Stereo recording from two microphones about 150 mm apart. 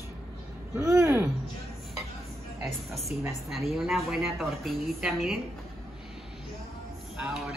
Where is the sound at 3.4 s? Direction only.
Centre (ahead or behind).